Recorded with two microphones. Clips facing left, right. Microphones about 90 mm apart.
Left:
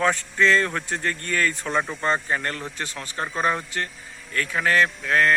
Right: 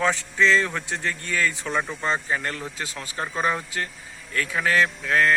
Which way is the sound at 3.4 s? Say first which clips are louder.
Left 1 dB; 5° right (ahead or behind).